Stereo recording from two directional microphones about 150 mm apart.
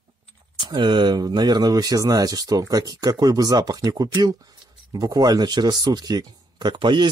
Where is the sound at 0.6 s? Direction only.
30° right (ahead or behind).